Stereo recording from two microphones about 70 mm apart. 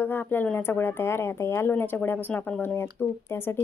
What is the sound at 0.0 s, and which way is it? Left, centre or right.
Speech, left.